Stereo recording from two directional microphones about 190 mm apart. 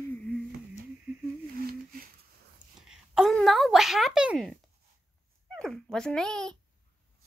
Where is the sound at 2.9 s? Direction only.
Centre (ahead or behind).